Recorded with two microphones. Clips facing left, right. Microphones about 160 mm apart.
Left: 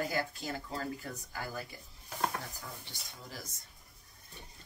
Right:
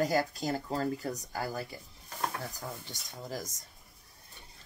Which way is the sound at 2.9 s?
45° right (ahead or behind).